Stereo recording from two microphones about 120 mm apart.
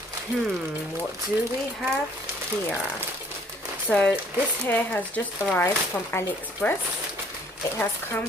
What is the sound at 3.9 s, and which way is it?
Speech, 10° left (ahead or behind).